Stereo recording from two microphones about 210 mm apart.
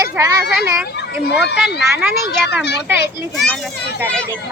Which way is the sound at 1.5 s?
50° left (ahead or behind).